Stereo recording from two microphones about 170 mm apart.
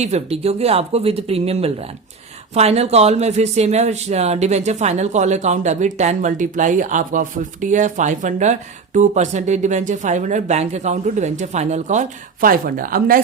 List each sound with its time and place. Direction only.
0.0 s speech: 40° right (ahead or behind); by 13.2 s 55° right (ahead or behind)